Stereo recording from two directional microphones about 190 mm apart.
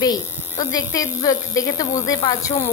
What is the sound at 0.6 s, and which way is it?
A woman's voice, 20° left (ahead or behind).